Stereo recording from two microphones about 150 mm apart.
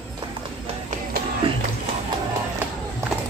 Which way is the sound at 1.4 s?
35° right (ahead or behind).